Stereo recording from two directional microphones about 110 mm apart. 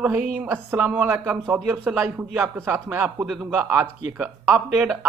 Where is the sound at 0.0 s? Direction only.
15° right (ahead or behind).